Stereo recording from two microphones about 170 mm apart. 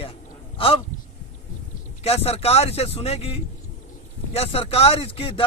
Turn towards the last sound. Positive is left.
turn(degrees=35)  # may be behind; listen again after turning